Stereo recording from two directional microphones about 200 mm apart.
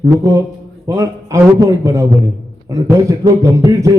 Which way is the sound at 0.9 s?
15° right (ahead or behind).